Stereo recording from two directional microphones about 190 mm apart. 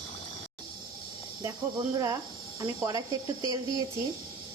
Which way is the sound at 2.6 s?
20° right (ahead or behind).